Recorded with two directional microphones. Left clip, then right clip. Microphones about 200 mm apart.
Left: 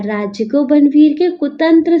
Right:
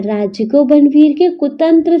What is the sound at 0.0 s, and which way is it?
A woman's voice, 35° right (ahead or behind).